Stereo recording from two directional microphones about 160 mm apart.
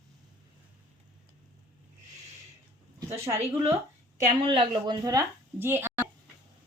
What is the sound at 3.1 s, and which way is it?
A woman's voice, 40° right (ahead or behind).